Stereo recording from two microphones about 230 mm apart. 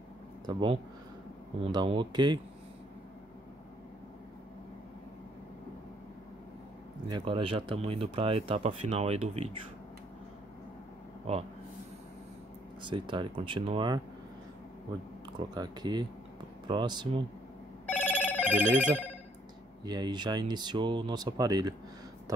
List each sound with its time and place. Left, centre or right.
0.5 s speech: centre
7.1 s speech: right
11.3 s speech: right
12.8 s speech: right
15.3 s speech: centre
17.8 s telephone bell ringing: centre
19.8 s speech: centre